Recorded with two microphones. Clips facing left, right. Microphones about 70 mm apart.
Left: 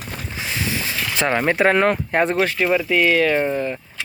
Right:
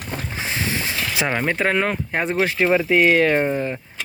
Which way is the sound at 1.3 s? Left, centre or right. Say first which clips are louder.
Left 5 dB; centre.